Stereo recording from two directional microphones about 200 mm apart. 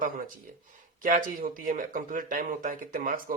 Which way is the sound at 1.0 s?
40° right (ahead or behind).